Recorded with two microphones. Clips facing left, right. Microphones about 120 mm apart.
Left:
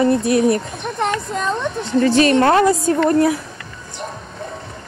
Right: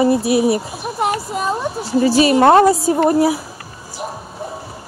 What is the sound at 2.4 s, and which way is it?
Speech, 30° right (ahead or behind).